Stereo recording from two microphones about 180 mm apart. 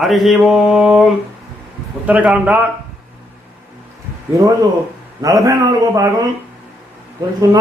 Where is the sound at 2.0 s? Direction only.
10° right (ahead or behind).